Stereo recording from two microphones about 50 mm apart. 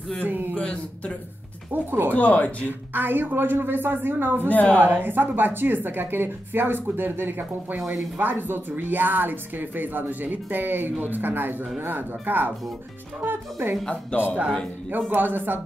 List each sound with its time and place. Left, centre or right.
0.2 s a woman's voice: right
0.6 s speech: left
1.7 s a woman's voice: right
2.1 s speech: left
2.6 s a woman's voice: right
14.1 s speech: left
14.9 s a woman's voice: right